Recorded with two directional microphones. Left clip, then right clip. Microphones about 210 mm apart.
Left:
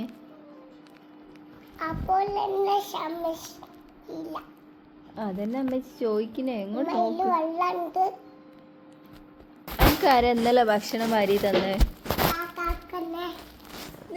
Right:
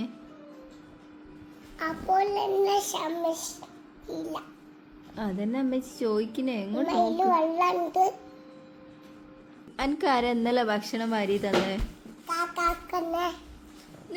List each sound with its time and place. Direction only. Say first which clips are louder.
1.8 s child singing: even; 20° right (ahead or behind)
5.1 s a woman's voice: left 1 dB; 25° right (ahead or behind)
9.7 s child singing: left 5 dB; 15° right (ahead or behind)
12.5 s child singing: right 4 dB; 30° right (ahead or behind)